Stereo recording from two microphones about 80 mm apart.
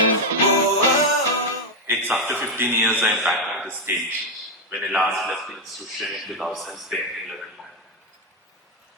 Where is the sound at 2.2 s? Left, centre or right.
Right.